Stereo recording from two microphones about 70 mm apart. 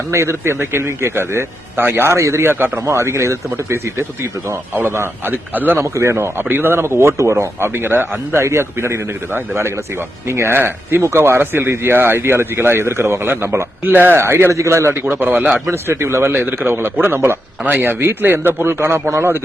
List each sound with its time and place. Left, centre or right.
0.1 s speech: right
5.8 s speech: right